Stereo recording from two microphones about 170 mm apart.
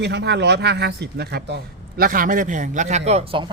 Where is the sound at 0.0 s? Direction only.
90° right.